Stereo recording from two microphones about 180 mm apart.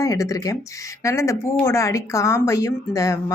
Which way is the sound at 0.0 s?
20° left (ahead or behind).